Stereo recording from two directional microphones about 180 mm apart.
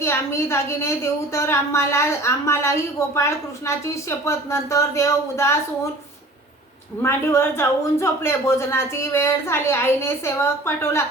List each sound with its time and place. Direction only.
0.0 s speech: 15° left (ahead or behind)
7.0 s speech: 15° left (ahead or behind)